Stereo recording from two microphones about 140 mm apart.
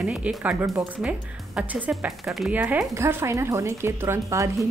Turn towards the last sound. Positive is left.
turn(degrees=-20)  # may be behind; listen again after turning